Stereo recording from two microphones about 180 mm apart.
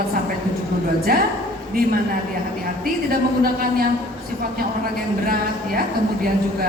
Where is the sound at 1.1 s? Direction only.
55° right (ahead or behind).